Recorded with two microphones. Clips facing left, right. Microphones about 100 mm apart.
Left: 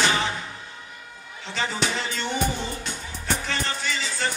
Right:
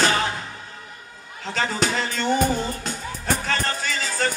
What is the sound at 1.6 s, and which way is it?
Music, 45° right (ahead or behind).